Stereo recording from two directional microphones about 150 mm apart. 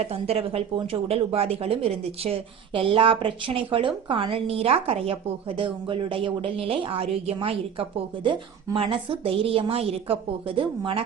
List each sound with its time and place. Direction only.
0.0 s a woman's voice: 45° right (ahead or behind)